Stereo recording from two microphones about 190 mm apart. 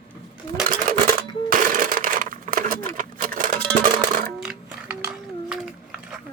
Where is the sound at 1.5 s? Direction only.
45° right (ahead or behind).